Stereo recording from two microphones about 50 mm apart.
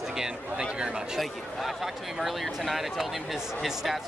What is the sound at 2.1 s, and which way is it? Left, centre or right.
A man's voice, centre.